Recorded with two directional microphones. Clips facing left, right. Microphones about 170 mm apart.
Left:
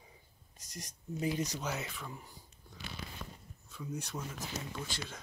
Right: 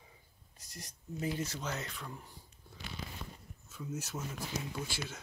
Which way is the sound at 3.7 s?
5° right (ahead or behind).